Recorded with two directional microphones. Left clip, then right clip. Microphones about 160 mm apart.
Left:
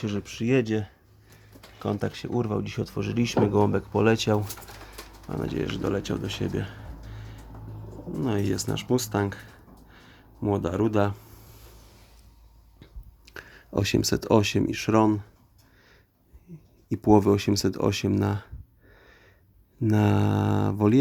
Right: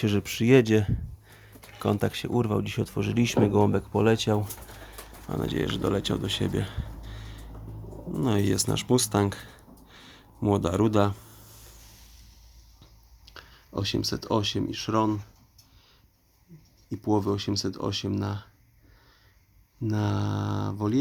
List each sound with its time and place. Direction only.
0.0 s speech: 30° right (ahead or behind); by 9.5 s 15° right (ahead or behind)
9.9 s a sound: 15° right (ahead or behind)
13.3 s speech: 30° left (ahead or behind)
16.9 s speech: 35° left (ahead or behind)
19.9 s speech: 35° left (ahead or behind)